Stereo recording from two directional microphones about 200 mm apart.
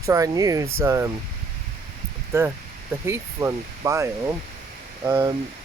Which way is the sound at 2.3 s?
10° right (ahead or behind).